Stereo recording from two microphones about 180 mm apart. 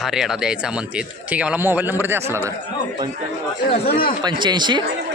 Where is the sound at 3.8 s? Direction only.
55° left (ahead or behind).